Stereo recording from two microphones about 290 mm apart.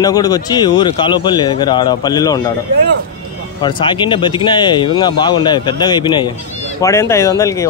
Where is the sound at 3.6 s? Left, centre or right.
Centre.